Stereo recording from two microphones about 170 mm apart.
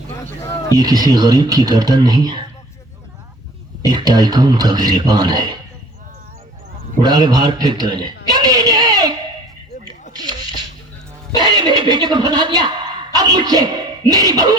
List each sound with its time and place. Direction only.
0.8 s a man's voice: 25° right (ahead or behind)
3.8 s a man's voice: 25° right (ahead or behind)
7.0 s a man's voice: 25° right (ahead or behind)
10.1 s a sound: 25° right (ahead or behind)
11.3 s speech: 25° right (ahead or behind)